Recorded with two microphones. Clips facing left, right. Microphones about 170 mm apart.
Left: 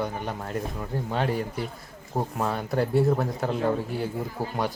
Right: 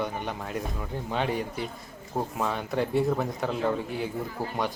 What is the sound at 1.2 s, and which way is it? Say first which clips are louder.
Speech: even; 45° left (ahead or behind).